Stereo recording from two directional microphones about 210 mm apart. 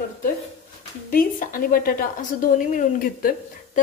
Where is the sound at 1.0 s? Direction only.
45° left (ahead or behind).